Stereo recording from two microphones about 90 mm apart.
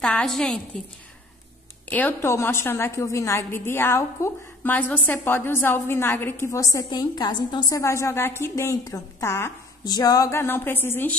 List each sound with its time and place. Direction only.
0.0 s a woman's voice: 5° left (ahead or behind)
1.9 s speech: 20° left (ahead or behind)
2.2 s a woman's voice: 30° left (ahead or behind)
6.5 s a woman's voice: 40° left (ahead or behind)
7.7 s a woman's voice: 35° left (ahead or behind)
9.8 s a woman's voice: 45° left (ahead or behind)
10.3 s a woman's voice: 25° left (ahead or behind)